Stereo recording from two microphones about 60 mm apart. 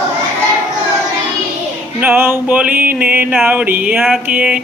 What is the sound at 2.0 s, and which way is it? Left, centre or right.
Music, right.